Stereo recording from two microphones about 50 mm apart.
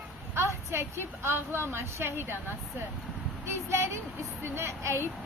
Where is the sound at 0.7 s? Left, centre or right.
Right.